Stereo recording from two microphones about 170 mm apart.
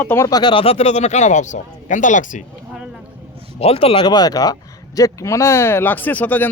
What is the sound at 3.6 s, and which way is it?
A man's voice, 35° left (ahead or behind).